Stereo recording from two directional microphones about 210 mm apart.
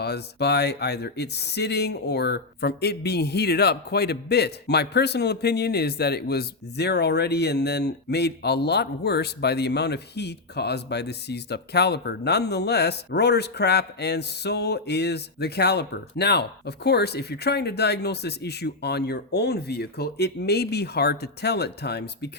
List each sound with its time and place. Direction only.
0.0 s speech: 50° left (ahead or behind)